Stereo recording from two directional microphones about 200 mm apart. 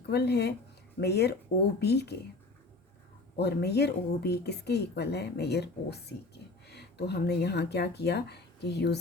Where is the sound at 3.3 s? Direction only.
55° left (ahead or behind).